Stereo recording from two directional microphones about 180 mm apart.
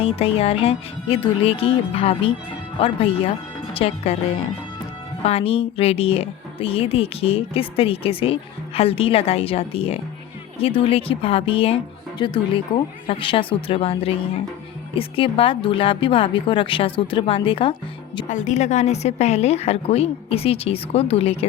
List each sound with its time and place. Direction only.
0.0 s a woman's voice: 35° left (ahead or behind)
5.2 s a woman's voice: 35° left (ahead or behind)
18.3 s a woman's voice: 45° left (ahead or behind)